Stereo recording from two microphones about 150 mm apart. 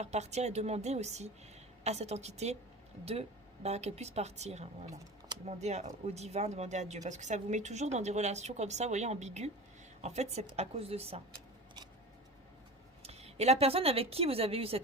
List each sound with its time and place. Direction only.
0.0 s speech: 50° right (ahead or behind)
13.0 s a woman's voice: 45° right (ahead or behind)